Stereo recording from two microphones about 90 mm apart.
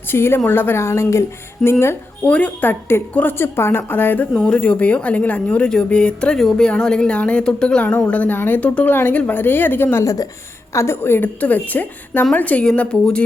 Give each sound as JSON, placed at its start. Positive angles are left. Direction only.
{"t": 0.1, "sound": "a woman's voice", "side_deg": 25}
{"t": 1.6, "sound": "speech", "side_deg": 5}
{"t": 2.2, "sound": "a woman's voice", "side_deg": 15}
{"t": 10.0, "sound": "a woman's voice", "side_deg": 40}
{"t": 10.8, "sound": "a woman's voice", "side_deg": 30}